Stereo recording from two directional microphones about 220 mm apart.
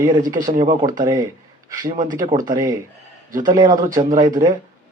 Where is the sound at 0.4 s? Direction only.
20° right (ahead or behind).